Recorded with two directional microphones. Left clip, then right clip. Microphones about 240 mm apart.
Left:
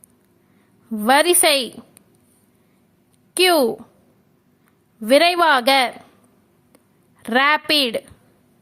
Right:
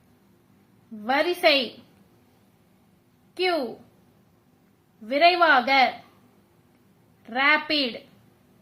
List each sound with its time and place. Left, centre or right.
1.0 s a woman's voice: left
3.3 s a woman's voice: left
5.0 s a woman's voice: left
7.2 s a woman's voice: left